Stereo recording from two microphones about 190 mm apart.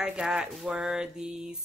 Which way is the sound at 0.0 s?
5° right (ahead or behind).